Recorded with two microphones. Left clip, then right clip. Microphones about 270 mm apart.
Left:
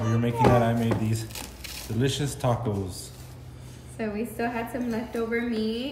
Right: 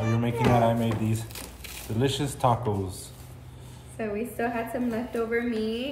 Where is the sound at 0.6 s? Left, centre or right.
Centre.